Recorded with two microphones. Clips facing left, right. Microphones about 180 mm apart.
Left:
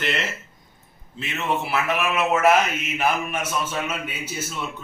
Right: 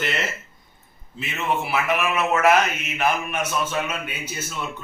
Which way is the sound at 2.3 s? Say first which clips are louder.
Even; 5° left (ahead or behind).